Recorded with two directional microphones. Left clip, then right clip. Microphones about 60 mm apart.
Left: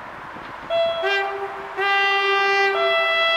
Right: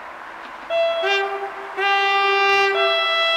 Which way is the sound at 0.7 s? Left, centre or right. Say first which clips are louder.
Right 1 dB; centre.